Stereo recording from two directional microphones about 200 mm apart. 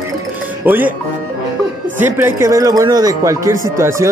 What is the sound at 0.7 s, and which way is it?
Speech, 10° right (ahead or behind).